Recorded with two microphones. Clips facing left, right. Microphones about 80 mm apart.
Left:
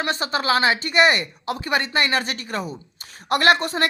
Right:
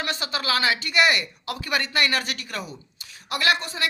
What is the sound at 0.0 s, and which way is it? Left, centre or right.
Speech, left.